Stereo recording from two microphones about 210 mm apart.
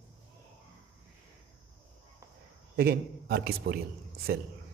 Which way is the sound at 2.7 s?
45° right (ahead or behind).